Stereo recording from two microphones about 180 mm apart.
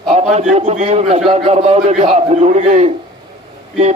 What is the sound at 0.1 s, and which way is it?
A man's voice, 40° right (ahead or behind).